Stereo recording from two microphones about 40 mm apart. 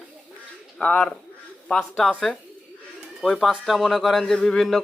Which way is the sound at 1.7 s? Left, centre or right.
Centre.